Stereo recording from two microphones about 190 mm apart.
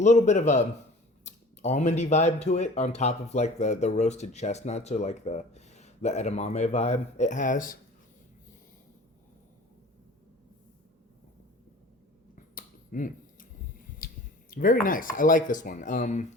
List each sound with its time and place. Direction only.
0.0 s speech: 35° left (ahead or behind)
12.5 s finger snapping: 45° left (ahead or behind)
14.0 s a sound: 50° left (ahead or behind)
14.5 s speech: 45° left (ahead or behind)